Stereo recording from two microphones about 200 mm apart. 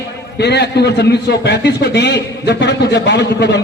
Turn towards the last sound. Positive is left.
turn(degrees=60)  # may be behind; listen again after turning